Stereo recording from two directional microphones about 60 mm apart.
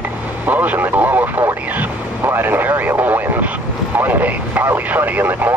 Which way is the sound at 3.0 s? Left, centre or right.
Right.